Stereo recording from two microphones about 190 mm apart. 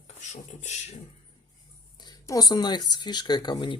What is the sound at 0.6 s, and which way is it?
Speech, 35° left (ahead or behind).